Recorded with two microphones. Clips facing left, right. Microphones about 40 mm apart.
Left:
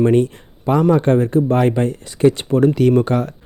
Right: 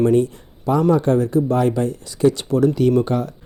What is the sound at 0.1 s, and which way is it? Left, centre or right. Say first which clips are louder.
Speech: left 1 dB; left.